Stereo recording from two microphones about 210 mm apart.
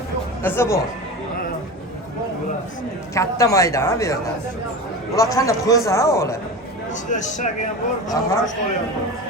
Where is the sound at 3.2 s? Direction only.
15° left (ahead or behind).